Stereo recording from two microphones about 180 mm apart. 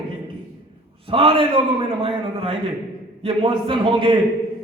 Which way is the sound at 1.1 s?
30° right (ahead or behind).